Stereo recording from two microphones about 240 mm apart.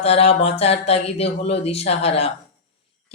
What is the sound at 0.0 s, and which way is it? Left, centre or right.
Speech, left.